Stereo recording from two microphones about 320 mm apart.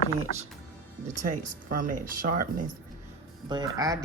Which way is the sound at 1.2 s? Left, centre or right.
Right.